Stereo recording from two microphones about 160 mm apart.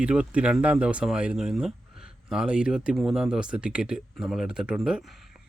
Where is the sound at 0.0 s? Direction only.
5° right (ahead or behind).